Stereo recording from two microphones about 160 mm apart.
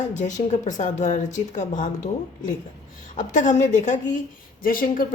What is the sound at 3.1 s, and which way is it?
A woman's voice, 50° left (ahead or behind).